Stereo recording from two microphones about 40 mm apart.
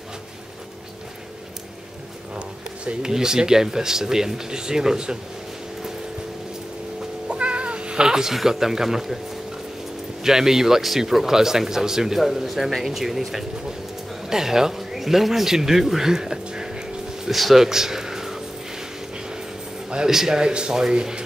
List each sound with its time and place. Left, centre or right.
2.3 s a sound: right
3.0 s speech: centre
7.2 s cat: right; by 8.4 s centre
8.5 s speech: centre
10.2 s speech: centre
14.3 s a sound: centre
17.3 s speech: centre
17.6 s a sound: centre
20.1 s speech: centre